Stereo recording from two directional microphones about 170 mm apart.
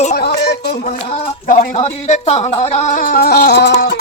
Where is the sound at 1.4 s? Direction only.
55° left (ahead or behind).